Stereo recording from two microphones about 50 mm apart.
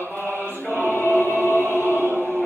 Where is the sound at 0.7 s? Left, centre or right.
Left.